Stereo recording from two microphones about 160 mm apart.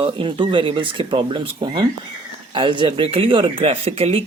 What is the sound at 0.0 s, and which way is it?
Speech, 35° right (ahead or behind).